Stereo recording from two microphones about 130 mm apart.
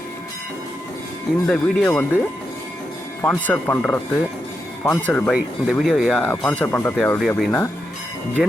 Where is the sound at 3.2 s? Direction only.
10° left (ahead or behind).